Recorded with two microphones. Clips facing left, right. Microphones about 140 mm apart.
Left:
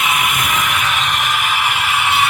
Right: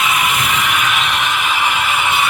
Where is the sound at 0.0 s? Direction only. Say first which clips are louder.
Right 1 dB; 55° left (ahead or behind).